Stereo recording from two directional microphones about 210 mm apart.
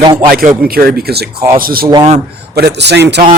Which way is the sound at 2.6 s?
50° right (ahead or behind).